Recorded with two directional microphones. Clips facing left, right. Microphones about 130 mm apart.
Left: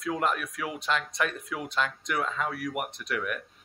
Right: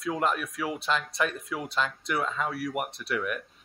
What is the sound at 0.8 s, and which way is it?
Speech, centre (ahead or behind).